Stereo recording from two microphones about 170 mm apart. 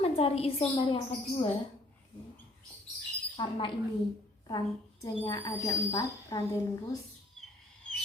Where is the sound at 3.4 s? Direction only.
30° left (ahead or behind).